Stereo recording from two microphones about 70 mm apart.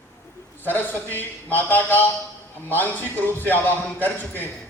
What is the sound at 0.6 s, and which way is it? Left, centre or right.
A man's voice, left.